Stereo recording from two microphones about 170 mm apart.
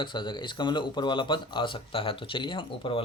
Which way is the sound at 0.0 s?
25° left (ahead or behind).